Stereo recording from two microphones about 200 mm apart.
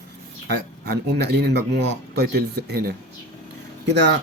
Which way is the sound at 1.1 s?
55° right (ahead or behind).